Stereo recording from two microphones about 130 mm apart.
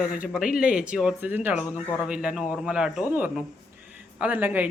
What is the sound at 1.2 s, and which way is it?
Speech, 15° right (ahead or behind).